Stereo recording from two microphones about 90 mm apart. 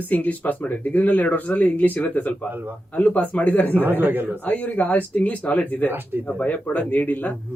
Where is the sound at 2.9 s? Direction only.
20° left (ahead or behind).